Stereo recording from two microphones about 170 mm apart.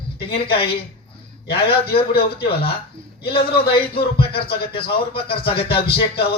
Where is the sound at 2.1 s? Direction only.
70° left (ahead or behind).